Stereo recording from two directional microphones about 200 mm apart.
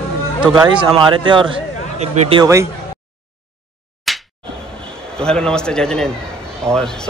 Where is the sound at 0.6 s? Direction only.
25° right (ahead or behind).